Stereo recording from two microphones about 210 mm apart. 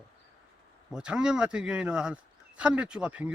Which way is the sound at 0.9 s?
5° right (ahead or behind).